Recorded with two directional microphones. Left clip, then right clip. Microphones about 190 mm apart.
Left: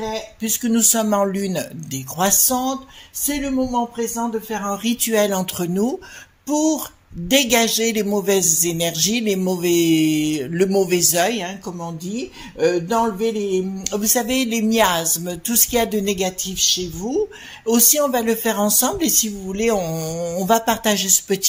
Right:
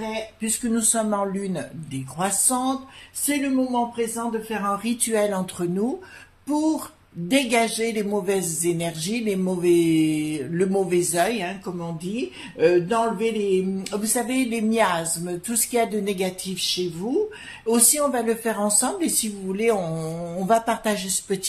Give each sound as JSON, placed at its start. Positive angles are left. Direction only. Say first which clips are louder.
{"t": 0.4, "sound": "a man's voice", "louder": "left 8 dB", "side_deg": 40}